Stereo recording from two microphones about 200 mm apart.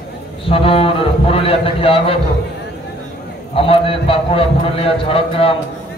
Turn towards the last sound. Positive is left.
turn(degrees=30)  # may be behind; listen again after turning